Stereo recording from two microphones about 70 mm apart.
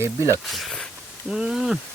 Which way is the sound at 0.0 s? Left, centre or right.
Right.